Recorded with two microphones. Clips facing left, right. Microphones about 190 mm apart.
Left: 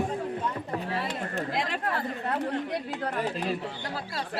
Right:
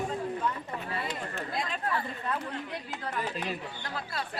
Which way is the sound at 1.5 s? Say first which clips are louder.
Even; 90° left.